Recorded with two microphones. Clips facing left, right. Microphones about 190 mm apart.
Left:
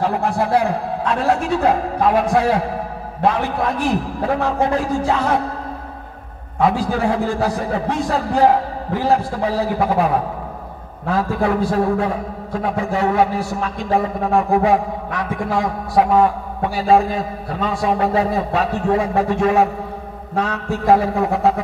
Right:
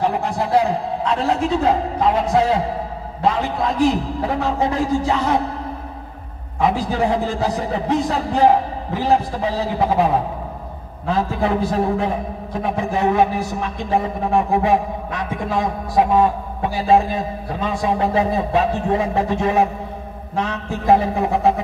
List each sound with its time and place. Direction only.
0.0 s a man's voice: 20° right (ahead or behind)
3.2 s a man's voice: 55° left (ahead or behind)
3.8 s a man's voice: 20° right (ahead or behind)
6.6 s a man's voice: 20° right (ahead or behind)
11.1 s a man's voice: 20° right (ahead or behind)